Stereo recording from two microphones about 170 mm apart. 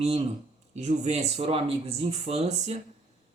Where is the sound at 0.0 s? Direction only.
35° right (ahead or behind).